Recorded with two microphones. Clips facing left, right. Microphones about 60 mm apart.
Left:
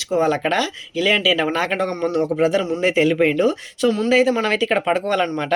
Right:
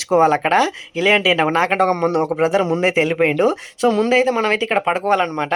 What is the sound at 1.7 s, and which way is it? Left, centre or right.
Speech, right.